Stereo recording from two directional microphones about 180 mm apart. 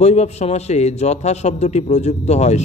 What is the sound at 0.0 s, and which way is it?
A man's voice, 35° left (ahead or behind).